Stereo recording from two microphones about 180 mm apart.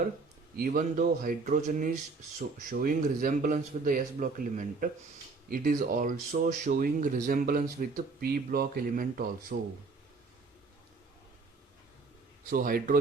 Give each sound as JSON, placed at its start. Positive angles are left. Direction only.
{"t": 0.5, "sound": "speech", "side_deg": -55}
{"t": 12.5, "sound": "speech", "side_deg": -50}